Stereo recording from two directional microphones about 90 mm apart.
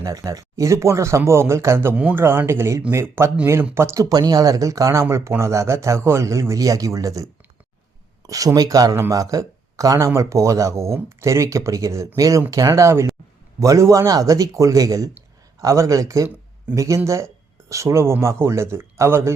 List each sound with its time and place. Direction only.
0.0 s speech: 40° right (ahead or behind)
2.0 s speech: 15° right (ahead or behind)
4.0 s speech: 45° right (ahead or behind)
8.3 s speech: 40° right (ahead or behind)